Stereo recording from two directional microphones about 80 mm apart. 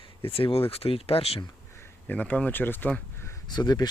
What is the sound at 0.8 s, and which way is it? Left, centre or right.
Speech, left.